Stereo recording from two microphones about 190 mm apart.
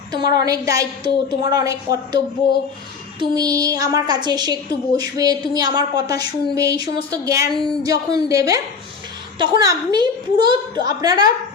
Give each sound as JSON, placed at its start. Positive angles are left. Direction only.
{"t": 0.3, "sound": "a woman's voice", "side_deg": -20}
{"t": 7.5, "sound": "speech", "side_deg": 5}
{"t": 7.9, "sound": "a woman's voice", "side_deg": -15}